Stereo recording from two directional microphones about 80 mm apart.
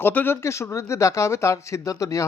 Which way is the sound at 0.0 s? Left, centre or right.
Left.